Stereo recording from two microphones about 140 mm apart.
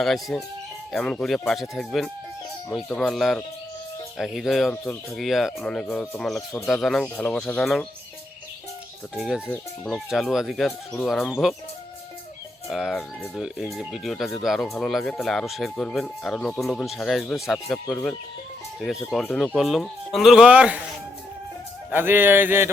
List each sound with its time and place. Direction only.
0.0 s speech: centre (ahead or behind)
9.1 s speech: 5° right (ahead or behind)
12.6 s speech: centre (ahead or behind)
21.8 s speech: 15° right (ahead or behind)